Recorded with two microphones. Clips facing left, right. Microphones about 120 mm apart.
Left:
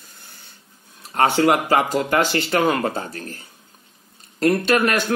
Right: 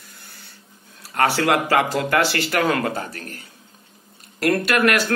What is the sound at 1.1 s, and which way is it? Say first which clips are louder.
Speech: left 2 dB; 20° left (ahead or behind).